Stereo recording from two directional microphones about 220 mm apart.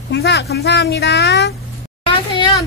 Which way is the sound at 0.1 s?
50° left (ahead or behind).